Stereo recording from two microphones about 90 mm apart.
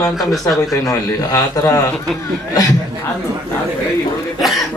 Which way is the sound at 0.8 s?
40° left (ahead or behind).